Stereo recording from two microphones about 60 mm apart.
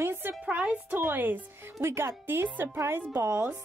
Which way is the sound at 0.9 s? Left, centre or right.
Right.